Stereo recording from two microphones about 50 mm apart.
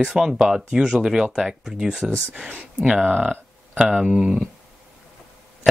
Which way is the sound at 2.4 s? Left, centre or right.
Right.